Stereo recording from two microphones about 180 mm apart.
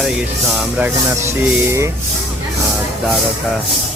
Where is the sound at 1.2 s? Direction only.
15° right (ahead or behind).